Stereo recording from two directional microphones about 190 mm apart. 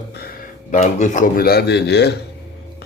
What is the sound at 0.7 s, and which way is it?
Speech, 40° left (ahead or behind).